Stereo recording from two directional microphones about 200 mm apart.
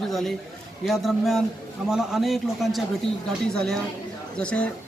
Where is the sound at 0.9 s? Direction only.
Centre (ahead or behind).